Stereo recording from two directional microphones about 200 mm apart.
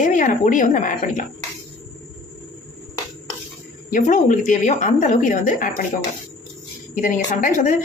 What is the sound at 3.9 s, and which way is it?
A woman's voice, 40° left (ahead or behind).